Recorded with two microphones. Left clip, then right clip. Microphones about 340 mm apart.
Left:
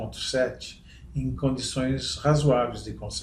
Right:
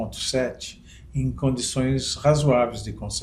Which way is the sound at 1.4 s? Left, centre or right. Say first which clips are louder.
Right 2 dB; right.